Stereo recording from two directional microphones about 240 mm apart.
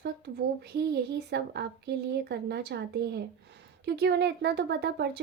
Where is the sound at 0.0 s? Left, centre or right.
Right.